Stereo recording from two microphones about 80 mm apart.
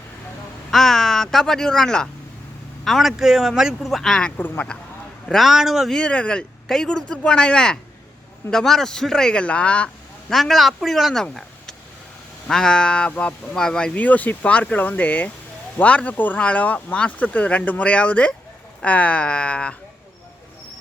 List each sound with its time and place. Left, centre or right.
0.7 s speech: centre
4.4 s speech: left
5.3 s speech: centre
6.0 s speech: centre
10.3 s speech: centre
13.9 s speech: centre